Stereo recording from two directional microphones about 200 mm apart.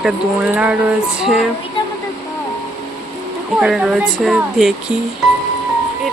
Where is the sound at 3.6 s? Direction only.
Centre (ahead or behind).